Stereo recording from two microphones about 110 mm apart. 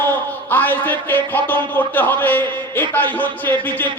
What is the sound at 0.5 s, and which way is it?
A man's voice, 15° left (ahead or behind).